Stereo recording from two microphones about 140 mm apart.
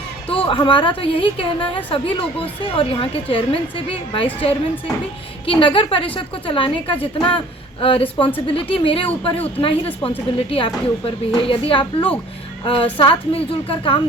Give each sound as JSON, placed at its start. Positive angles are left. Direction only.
{"t": 0.3, "sound": "a woman's voice", "side_deg": 40}